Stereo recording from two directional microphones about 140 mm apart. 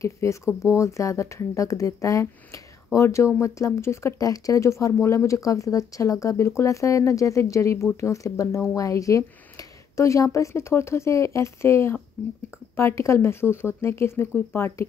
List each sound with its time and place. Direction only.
0.0 s speech: 20° left (ahead or behind)